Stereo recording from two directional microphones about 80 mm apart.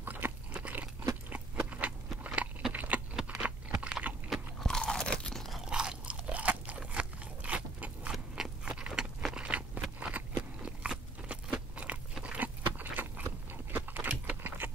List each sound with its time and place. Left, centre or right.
0.0 s crunch: right
1.3 s biting: centre
2.7 s a sound: centre
3.3 s computer keyboard: centre
4.6 s crunch: centre
5.7 s crunch: centre
8.4 s biting: centre